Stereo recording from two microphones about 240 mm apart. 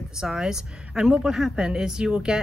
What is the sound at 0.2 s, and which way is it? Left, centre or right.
A woman's voice, centre.